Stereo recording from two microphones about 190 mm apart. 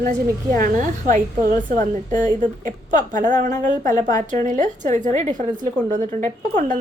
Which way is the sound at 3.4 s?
20° left (ahead or behind).